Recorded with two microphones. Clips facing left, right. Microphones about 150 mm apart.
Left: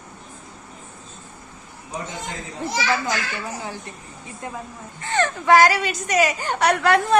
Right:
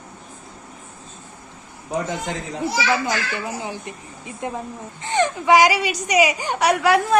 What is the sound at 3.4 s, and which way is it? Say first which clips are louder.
A woman's voice: right 3 dB; 15° right (ahead or behind).